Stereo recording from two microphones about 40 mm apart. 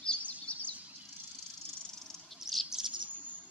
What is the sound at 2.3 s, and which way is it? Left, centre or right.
Bird, centre.